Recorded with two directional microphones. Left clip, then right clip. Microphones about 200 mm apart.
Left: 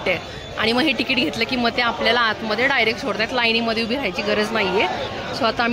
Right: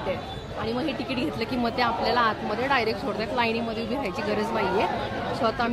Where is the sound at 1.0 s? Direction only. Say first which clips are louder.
Left 8 dB; 10° left (ahead or behind).